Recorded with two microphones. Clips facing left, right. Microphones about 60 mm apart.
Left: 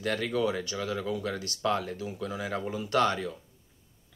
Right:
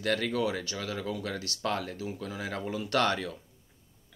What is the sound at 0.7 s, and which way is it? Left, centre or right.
Speech, left.